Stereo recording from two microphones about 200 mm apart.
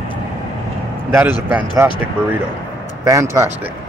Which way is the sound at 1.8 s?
10° right (ahead or behind).